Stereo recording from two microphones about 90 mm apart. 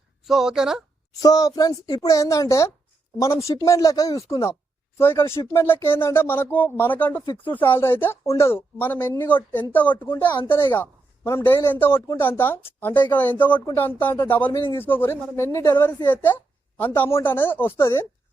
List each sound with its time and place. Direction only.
0.3 s a woman's voice: 5° right (ahead or behind)
1.2 s speech: 45° left (ahead or behind)
3.5 s a woman's voice: 45° left (ahead or behind); by 18.0 s 30° left (ahead or behind)